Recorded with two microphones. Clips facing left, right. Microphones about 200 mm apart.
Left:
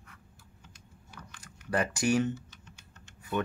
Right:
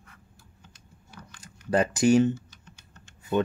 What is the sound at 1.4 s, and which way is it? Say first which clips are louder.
Speech: right 6 dB; 25° right (ahead or behind).